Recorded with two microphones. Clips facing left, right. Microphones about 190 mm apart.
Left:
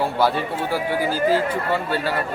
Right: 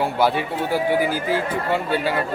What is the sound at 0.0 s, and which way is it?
Speech, 15° right (ahead or behind).